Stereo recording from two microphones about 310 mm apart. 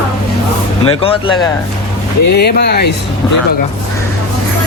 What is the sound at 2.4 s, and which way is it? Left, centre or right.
Speech, left.